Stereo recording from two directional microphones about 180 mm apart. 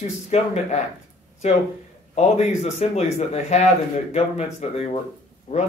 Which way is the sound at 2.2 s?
40° left (ahead or behind).